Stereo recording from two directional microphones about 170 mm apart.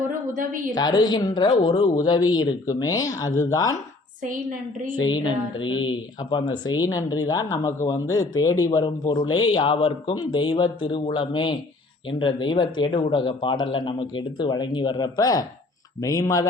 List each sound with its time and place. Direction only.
0.1 s a sound: 50° right (ahead or behind)
0.7 s speech: 25° left (ahead or behind)
4.9 s speech: 25° left (ahead or behind)